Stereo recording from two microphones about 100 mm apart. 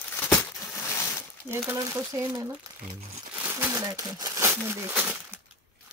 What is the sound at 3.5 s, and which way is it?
Crumpling, 25° right (ahead or behind).